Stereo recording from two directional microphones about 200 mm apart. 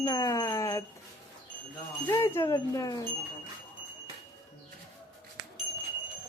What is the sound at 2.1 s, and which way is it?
Speech, 15° left (ahead or behind).